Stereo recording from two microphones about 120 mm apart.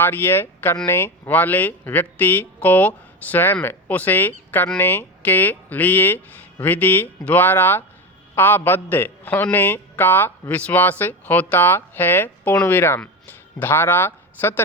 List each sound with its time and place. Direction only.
0.0 s a man's voice: 15° left (ahead or behind)